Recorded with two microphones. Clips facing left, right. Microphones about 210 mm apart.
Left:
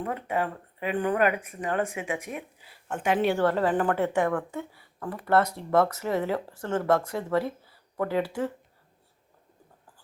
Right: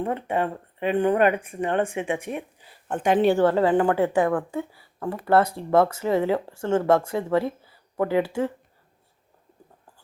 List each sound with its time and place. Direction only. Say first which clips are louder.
0.0 s speech: right 4 dB; 25° right (ahead or behind)